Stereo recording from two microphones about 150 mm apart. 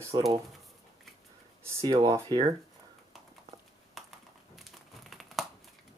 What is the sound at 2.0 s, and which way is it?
Speech, 25° right (ahead or behind).